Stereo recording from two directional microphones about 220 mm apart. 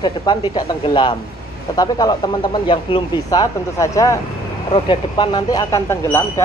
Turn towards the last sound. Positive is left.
turn(degrees=10)  # may be behind; listen again after turning